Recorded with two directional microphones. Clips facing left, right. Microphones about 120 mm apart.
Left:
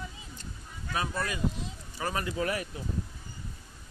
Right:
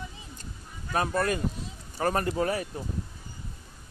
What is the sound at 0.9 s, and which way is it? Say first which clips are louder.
Speech: right 6 dB; 50° right (ahead or behind).